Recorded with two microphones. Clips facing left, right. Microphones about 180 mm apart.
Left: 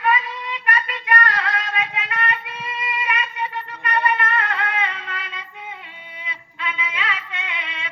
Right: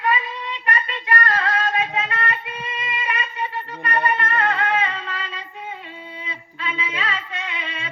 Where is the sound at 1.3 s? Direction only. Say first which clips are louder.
Right 3 dB; 30° right (ahead or behind).